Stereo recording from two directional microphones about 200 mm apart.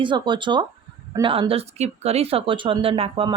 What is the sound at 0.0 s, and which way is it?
Speech, 25° right (ahead or behind).